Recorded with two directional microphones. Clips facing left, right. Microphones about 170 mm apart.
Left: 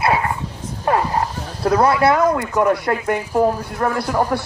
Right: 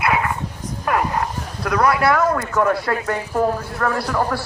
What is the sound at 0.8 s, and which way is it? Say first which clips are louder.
Speech: left 2 dB; 30° left (ahead or behind).